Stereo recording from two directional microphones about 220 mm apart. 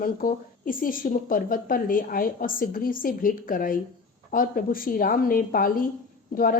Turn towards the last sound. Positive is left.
turn(degrees=40)  # may be behind; listen again after turning